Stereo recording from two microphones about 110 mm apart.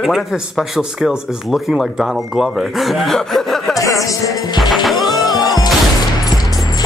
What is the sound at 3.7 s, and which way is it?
Music, 30° left (ahead or behind).